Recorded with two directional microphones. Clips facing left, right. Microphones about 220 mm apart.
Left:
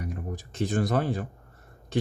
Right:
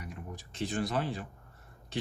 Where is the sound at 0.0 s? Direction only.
45° left (ahead or behind).